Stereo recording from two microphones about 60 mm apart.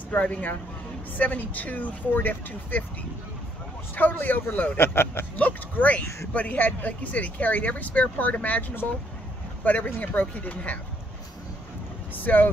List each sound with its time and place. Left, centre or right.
0.1 s a man's voice: left
5.3 s speech: left
12.2 s a man's voice: left